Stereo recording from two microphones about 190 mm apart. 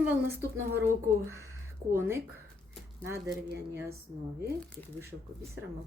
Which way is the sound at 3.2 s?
5° right (ahead or behind).